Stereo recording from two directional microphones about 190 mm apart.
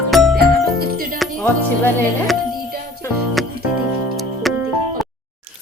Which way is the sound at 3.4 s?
Centre (ahead or behind).